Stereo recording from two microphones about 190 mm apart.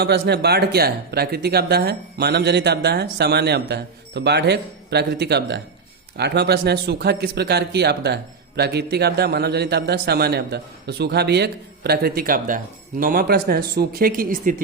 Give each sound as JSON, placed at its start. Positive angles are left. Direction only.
{"t": 0.0, "sound": "speech", "side_deg": -60}